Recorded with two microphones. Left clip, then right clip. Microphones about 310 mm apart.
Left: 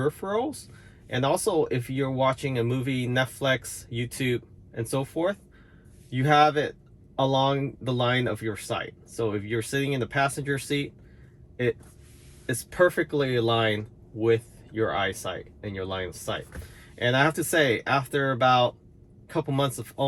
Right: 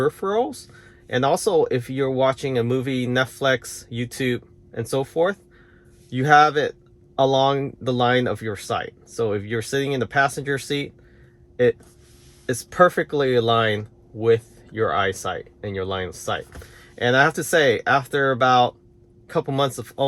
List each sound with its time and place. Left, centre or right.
0.2 s speech: right
1.1 s speech: right
12.5 s speech: right